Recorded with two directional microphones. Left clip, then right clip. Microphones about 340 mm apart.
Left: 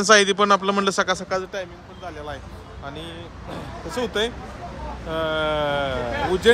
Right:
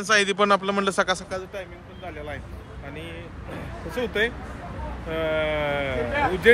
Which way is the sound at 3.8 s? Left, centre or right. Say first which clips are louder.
Left 1 dB; centre.